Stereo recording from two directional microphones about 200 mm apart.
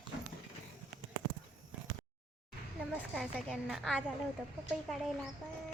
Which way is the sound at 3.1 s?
Centre (ahead or behind).